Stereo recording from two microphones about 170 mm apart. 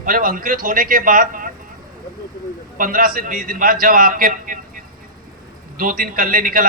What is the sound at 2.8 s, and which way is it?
A man's voice, 55° right (ahead or behind).